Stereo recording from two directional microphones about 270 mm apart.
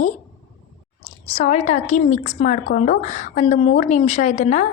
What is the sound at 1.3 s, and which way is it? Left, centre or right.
A woman's voice, left.